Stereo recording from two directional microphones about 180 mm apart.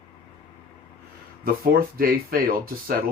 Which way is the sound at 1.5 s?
55° right (ahead or behind).